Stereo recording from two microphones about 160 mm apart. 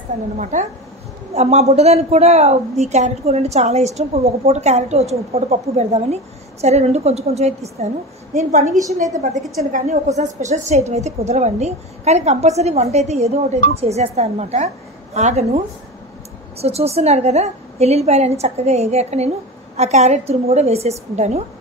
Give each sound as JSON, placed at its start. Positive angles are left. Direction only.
{"t": 0.4, "sound": "a woman's voice", "side_deg": -50}
{"t": 10.1, "sound": "a woman's voice", "side_deg": -45}